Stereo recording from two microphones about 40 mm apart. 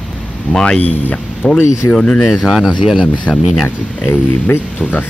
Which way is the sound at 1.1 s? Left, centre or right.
Left.